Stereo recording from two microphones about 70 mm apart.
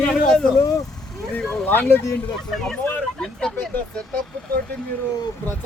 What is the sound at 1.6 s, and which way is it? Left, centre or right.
Speech, left.